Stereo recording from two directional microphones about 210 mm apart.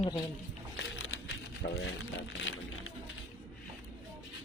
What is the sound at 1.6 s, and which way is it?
Speech, 50° left (ahead or behind).